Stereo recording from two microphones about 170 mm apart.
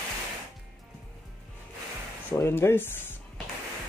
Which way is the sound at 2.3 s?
15° left (ahead or behind).